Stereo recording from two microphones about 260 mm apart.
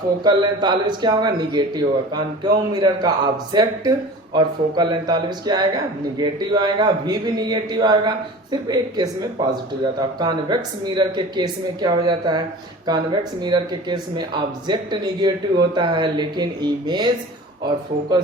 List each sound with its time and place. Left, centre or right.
0.3 s a man's voice: centre
10.2 s a man's voice: centre